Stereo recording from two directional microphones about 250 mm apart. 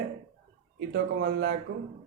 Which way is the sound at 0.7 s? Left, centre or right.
Right.